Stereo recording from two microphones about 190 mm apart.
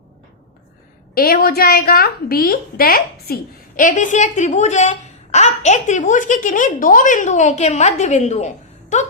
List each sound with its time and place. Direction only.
1.1 s a woman's voice: 50° left (ahead or behind)